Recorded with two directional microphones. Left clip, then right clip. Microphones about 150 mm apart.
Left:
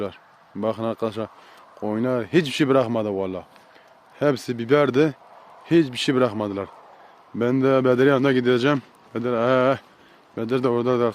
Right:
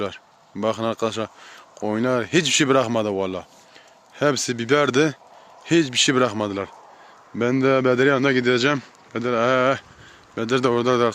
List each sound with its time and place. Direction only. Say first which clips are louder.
0.6 s speech: right 2 dB; centre (ahead or behind)
7.3 s a man's voice: even; 15° left (ahead or behind)
10.3 s speech: right 2 dB; centre (ahead or behind)